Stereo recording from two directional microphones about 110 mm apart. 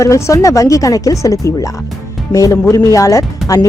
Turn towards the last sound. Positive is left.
turn(degrees=30)  # may be behind; listen again after turning